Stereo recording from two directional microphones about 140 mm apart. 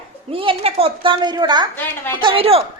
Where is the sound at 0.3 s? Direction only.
45° right (ahead or behind).